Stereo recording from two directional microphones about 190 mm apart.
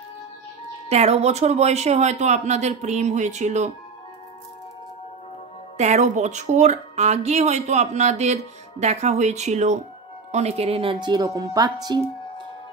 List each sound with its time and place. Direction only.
0.8 s speech: 35° right (ahead or behind)
5.8 s speech: 40° right (ahead or behind); by 12.0 s 20° right (ahead or behind)